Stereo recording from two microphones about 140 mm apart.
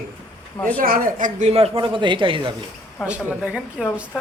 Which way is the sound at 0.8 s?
90° right.